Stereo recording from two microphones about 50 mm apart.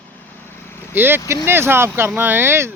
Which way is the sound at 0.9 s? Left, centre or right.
Right.